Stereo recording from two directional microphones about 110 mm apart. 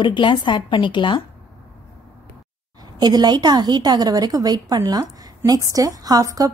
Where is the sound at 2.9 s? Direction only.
40° right (ahead or behind).